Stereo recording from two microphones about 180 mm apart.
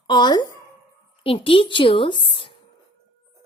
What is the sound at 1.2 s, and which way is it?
A woman's voice, 30° left (ahead or behind).